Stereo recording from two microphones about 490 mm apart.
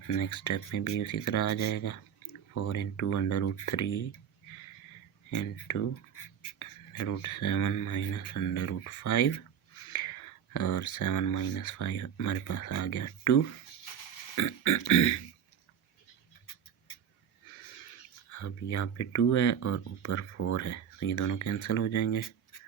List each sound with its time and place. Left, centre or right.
0.1 s speech: left
5.3 s speech: left
10.5 s speech: left
18.3 s speech: left